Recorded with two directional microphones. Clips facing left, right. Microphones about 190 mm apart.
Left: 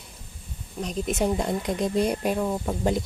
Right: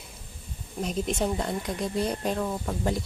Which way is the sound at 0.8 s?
Centre (ahead or behind).